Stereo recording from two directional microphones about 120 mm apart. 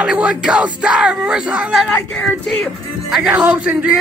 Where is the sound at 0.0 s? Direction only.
10° right (ahead or behind).